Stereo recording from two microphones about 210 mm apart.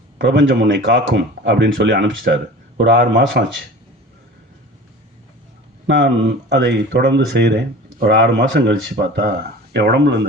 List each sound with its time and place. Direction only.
0.2 s speech: 60° right (ahead or behind)
6.5 s speech: 55° right (ahead or behind)